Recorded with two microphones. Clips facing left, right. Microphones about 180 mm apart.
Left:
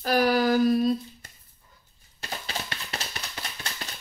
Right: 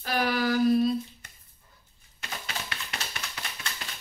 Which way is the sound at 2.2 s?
35° left (ahead or behind).